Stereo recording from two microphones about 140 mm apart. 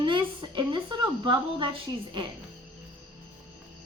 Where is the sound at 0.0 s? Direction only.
35° right (ahead or behind).